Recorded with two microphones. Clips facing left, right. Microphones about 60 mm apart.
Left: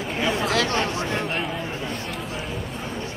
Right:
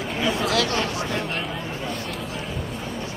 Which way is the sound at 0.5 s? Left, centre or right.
Left.